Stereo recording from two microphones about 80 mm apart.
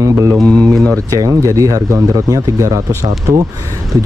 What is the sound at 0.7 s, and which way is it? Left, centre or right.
Speech, centre.